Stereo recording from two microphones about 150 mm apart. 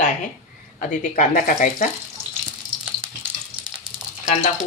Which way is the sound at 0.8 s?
65° left (ahead or behind).